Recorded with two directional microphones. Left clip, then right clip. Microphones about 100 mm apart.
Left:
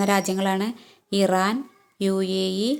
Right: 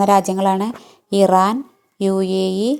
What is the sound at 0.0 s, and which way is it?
Speech, 35° right (ahead or behind).